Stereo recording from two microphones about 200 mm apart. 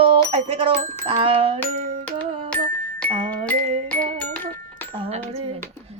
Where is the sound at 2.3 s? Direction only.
30° right (ahead or behind).